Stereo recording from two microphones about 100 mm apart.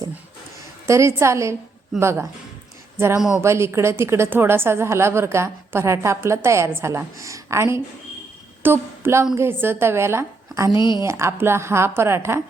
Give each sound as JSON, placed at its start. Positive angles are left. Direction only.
{"t": 0.9, "sound": "a woman's voice", "side_deg": -30}
{"t": 3.4, "sound": "a woman's voice", "side_deg": -25}
{"t": 8.6, "sound": "a sound", "side_deg": -25}
{"t": 9.3, "sound": "a woman's voice", "side_deg": -25}
{"t": 10.8, "sound": "a woman's voice", "side_deg": 50}
{"t": 11.0, "sound": "a woman's voice", "side_deg": -25}